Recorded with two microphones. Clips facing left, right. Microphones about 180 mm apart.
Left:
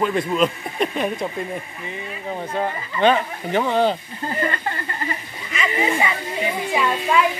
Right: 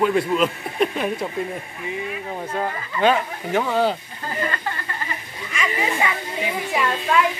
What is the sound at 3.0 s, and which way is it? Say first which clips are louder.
Speech: left 1 dB; 5° right (ahead or behind).